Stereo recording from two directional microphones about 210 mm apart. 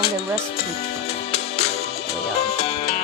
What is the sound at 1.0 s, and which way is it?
Music, 30° left (ahead or behind).